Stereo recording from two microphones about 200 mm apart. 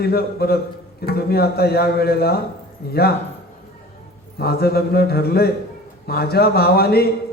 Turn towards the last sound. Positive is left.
turn(degrees=50)  # may be behind; listen again after turning